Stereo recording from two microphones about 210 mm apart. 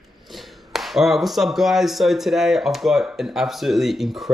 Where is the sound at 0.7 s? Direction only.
Centre (ahead or behind).